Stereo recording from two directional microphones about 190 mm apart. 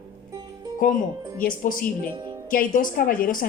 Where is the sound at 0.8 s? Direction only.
45° left (ahead or behind).